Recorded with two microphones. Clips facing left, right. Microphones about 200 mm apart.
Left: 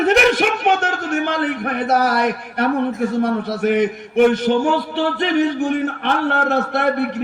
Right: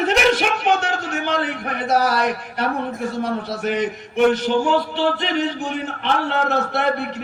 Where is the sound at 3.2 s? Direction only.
55° left (ahead or behind).